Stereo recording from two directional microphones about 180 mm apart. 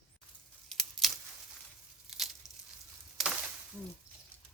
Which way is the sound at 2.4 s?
Centre (ahead or behind).